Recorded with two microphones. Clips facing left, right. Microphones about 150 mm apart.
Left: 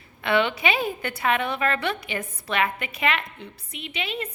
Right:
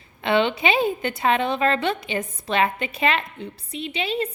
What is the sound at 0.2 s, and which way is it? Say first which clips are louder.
A woman's voice: right 2 dB; 25° right (ahead or behind).